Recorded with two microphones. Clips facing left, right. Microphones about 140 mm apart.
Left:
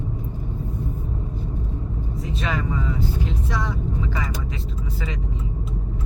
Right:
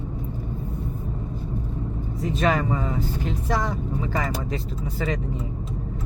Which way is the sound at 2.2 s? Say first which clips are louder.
Right 6 dB; 45° right (ahead or behind).